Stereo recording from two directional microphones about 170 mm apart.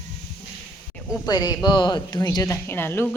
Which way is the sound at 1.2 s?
25° left (ahead or behind).